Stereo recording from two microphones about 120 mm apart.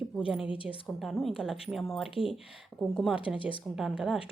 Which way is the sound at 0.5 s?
45° left (ahead or behind).